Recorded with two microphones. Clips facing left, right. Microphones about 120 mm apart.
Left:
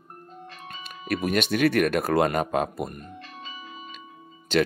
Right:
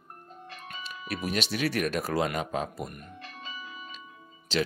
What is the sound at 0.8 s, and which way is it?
Speech, 55° left (ahead or behind).